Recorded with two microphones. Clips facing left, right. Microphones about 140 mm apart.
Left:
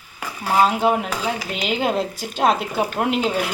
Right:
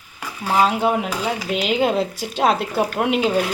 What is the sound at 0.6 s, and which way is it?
Speech, centre (ahead or behind).